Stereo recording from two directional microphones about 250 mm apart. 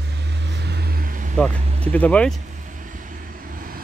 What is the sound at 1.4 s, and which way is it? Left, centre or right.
Speech, centre.